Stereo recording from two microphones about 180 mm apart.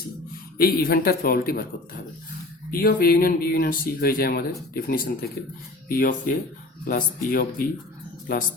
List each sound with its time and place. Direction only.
0.6 s speech: 55° left (ahead or behind)
2.6 s speech: 55° left (ahead or behind)